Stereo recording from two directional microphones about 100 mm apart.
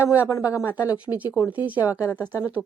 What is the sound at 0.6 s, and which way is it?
Speech, 15° right (ahead or behind).